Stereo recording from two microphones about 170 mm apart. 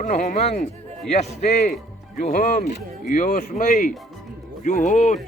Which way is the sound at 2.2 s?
55° left (ahead or behind).